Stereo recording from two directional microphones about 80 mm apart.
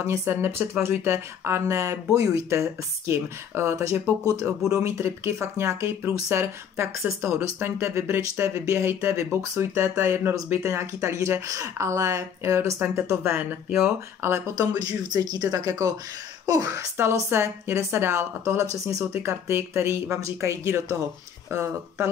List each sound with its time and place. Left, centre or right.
0.0 s a woman's voice: right
13.8 s a woman's voice: right
14.6 s speech: right
16.9 s a woman's voice: right